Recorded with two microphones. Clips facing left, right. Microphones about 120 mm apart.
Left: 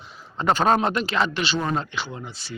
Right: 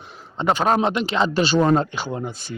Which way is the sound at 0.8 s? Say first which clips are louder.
Right 3 dB; 20° right (ahead or behind).